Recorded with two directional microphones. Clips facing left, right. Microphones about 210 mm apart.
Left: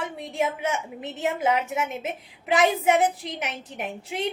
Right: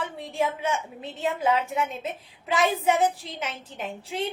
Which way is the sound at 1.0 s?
80° left.